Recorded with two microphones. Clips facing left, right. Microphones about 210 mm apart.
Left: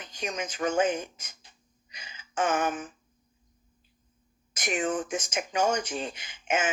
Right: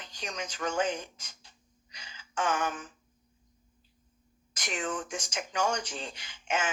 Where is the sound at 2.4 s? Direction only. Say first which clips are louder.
Left 4 dB; 50° left (ahead or behind).